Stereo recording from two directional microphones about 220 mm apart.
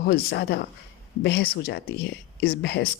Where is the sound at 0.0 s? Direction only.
45° left (ahead or behind).